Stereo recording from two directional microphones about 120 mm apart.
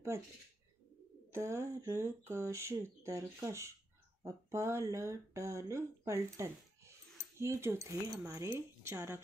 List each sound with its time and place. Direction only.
1.3 s speech: 20° right (ahead or behind)